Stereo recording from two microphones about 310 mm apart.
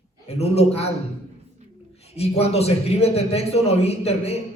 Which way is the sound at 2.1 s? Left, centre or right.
Centre.